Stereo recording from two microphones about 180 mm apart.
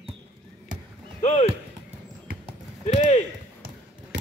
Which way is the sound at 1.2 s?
40° left (ahead or behind).